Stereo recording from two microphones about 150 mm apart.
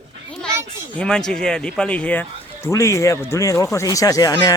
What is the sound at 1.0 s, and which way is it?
Speech, 5° left (ahead or behind).